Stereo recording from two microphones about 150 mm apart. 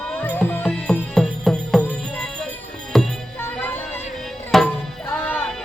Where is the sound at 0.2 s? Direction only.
15° left (ahead or behind).